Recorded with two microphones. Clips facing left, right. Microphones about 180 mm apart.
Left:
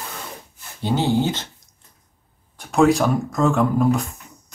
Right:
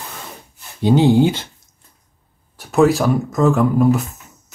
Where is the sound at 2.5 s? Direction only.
5° right (ahead or behind).